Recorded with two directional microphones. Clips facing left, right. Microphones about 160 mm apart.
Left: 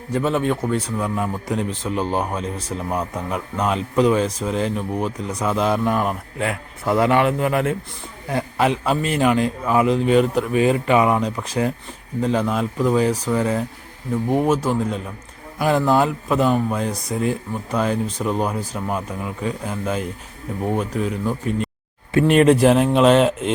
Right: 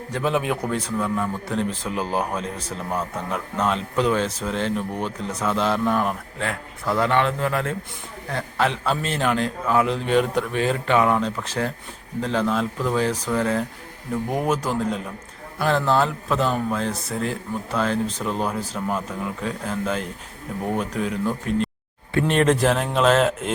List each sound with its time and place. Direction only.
0.1 s speech: centre (ahead or behind)
0.9 s speech: 15° left (ahead or behind)
1.9 s speech: centre (ahead or behind)